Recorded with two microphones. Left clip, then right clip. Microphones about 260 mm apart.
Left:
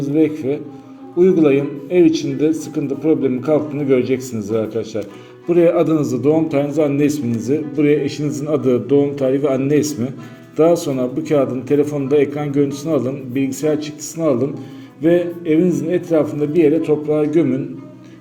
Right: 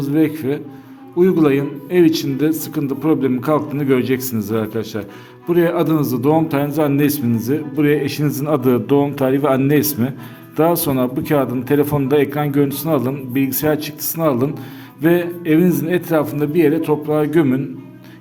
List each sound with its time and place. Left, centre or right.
0.0 s a man's voice: right